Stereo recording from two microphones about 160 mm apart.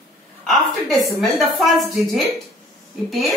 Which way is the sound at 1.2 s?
Centre (ahead or behind).